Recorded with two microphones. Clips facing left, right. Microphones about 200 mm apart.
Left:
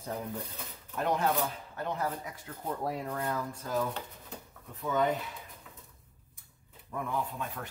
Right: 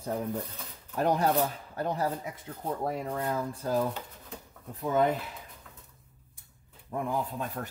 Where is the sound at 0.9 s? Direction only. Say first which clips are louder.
Right 4 dB; 35° right (ahead or behind).